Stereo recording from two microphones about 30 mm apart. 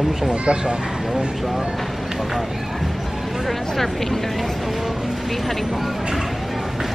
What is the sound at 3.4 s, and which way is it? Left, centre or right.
Speech, centre.